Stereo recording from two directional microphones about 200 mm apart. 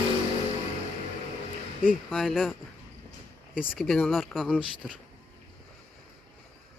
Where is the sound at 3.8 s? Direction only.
5° left (ahead or behind).